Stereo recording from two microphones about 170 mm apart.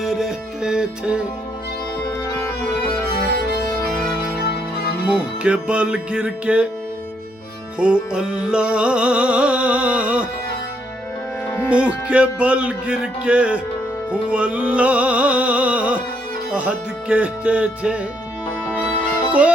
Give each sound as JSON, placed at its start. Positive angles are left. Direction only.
{"t": 0.0, "sound": "music", "side_deg": 0}
{"t": 2.3, "sound": "music", "side_deg": 15}
{"t": 4.4, "sound": "music", "side_deg": 65}
{"t": 5.0, "sound": "music", "side_deg": -5}
{"t": 7.8, "sound": "music", "side_deg": -5}
{"t": 12.0, "sound": "music", "side_deg": -5}
{"t": 19.3, "sound": "music", "side_deg": -10}